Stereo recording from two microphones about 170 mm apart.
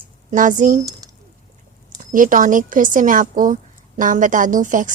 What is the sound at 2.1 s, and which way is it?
A woman's voice, 50° right (ahead or behind).